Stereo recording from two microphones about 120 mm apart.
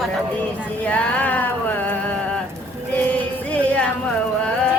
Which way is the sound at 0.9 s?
15° left (ahead or behind).